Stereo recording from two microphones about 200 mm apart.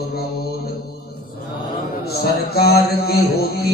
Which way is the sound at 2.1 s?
50° left (ahead or behind).